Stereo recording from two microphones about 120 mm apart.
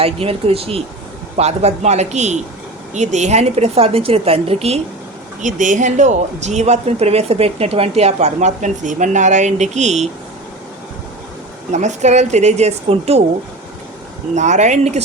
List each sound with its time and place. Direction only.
0.0 s speech: 55° right (ahead or behind)
1.4 s a woman's voice: 65° right (ahead or behind)
5.4 s speech: 90° right; by 10.1 s 70° right (ahead or behind)
11.7 s speech: 80° right; by 13.2 s 60° right (ahead or behind)
14.3 s speech: 80° right